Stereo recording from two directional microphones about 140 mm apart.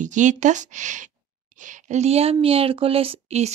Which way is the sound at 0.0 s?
60° right (ahead or behind).